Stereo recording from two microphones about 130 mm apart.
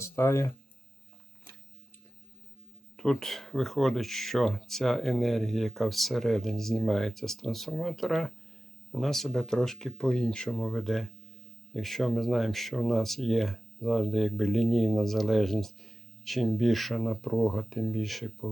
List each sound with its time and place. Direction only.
0.0 s speech: 20° left (ahead or behind)
3.0 s speech: 5° left (ahead or behind)